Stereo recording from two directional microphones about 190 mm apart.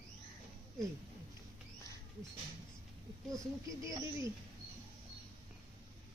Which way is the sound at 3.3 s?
15° right (ahead or behind).